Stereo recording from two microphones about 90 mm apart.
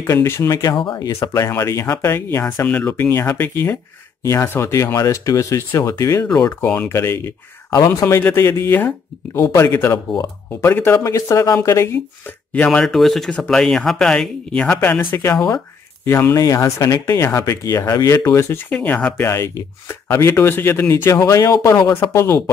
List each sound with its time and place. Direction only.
0.0 s speech: 30° left (ahead or behind)
2.6 s speech: 20° left (ahead or behind); by 6.2 s 40° left (ahead or behind)
6.4 s speech: 20° left (ahead or behind)
6.9 s speech: 30° left (ahead or behind)
11.1 s speech: 35° left (ahead or behind)
12.6 s speech: 5° left (ahead or behind); by 18.6 s 30° left (ahead or behind)
18.7 s speech: 15° left (ahead or behind)
19.2 s speech: 30° left (ahead or behind)
21.2 s speech: 40° left (ahead or behind)